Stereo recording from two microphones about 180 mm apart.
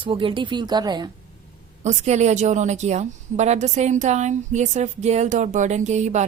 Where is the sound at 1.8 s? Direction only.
40° right (ahead or behind).